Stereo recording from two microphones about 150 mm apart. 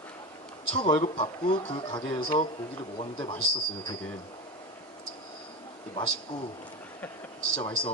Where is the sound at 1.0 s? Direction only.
40° left (ahead or behind).